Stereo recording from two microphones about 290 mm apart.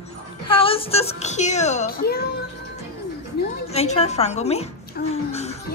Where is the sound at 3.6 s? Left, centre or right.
Left.